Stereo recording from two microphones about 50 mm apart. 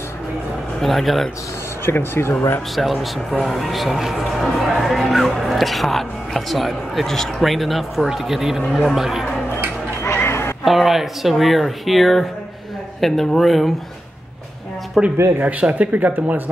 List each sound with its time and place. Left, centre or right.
0.7 s speech: centre
1.9 s speech: left
2.7 s speech: centre
10.1 s a sound: left
10.6 s speech: centre
15.0 s speech: centre
15.4 s speech: right
15.9 s speech: right